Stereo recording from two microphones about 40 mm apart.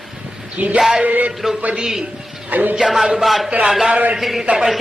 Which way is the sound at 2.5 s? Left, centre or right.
Right.